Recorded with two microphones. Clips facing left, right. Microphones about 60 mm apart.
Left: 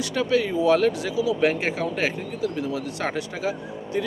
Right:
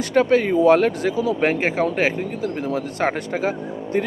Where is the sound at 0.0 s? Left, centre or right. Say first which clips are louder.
Right 6 dB; right.